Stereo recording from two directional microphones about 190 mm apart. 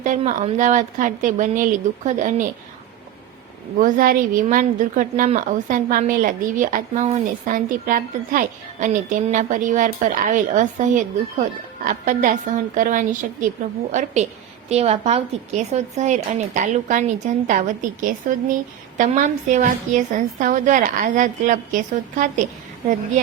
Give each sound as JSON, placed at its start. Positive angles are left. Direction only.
{"t": 0.0, "sound": "a woman's voice", "side_deg": -40}
{"t": 3.8, "sound": "a woman's voice", "side_deg": -45}